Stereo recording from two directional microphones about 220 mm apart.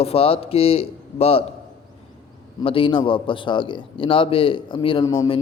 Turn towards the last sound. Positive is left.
turn(degrees=20)  # may be behind; listen again after turning